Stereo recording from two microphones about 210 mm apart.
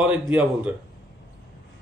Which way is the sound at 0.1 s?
5° right (ahead or behind).